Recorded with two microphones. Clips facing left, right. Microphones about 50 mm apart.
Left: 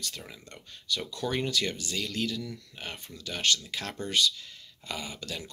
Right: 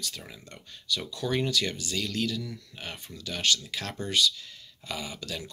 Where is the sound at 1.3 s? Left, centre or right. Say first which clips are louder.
Right 2 dB; left.